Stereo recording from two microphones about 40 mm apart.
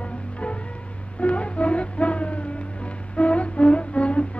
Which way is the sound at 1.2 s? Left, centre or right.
Left.